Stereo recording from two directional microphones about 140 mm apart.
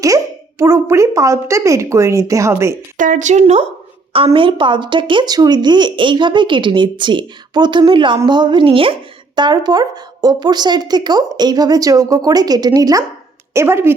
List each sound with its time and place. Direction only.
0.6 s speech: 20° right (ahead or behind)
3.0 s speech: 65° right (ahead or behind); by 3.7 s 50° right (ahead or behind)
4.4 s a woman's voice: 35° right (ahead or behind); by 13.9 s 20° right (ahead or behind)